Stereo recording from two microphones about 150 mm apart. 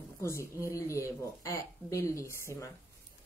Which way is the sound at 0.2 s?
20° left (ahead or behind).